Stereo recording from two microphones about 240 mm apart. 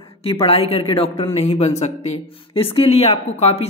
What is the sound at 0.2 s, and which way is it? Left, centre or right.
Speech, left.